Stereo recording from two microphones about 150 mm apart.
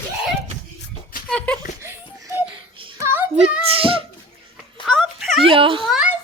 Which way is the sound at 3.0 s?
15° right (ahead or behind).